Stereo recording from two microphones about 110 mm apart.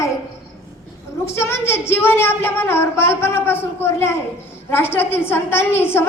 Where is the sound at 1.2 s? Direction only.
25° left (ahead or behind).